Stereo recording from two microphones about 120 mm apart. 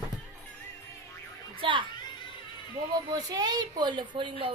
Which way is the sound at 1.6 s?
45° right (ahead or behind).